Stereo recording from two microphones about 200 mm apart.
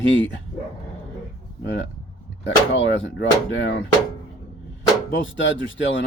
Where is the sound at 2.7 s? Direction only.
70° left (ahead or behind).